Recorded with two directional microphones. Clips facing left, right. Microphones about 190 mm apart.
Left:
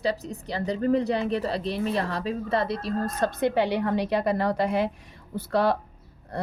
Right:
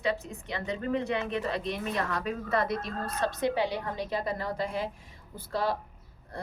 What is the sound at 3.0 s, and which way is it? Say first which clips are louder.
A woman's voice: left 3 dB; 50° left (ahead or behind).